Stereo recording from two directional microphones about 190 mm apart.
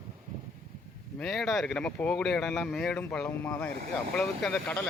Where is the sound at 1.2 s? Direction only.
Centre (ahead or behind).